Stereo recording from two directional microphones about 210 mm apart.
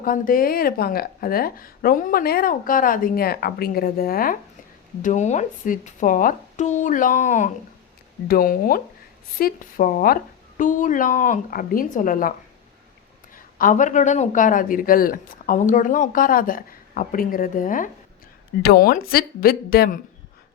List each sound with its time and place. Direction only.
0.0 s a woman's voice: 40° left (ahead or behind)
13.3 s a woman's voice: 40° left (ahead or behind)